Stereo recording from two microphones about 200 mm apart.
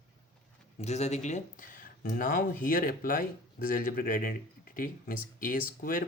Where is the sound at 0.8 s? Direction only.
35° left (ahead or behind).